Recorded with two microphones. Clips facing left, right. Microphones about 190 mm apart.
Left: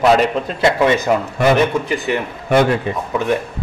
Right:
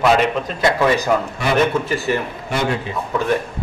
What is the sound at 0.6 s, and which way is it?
A man's voice, 20° left (ahead or behind).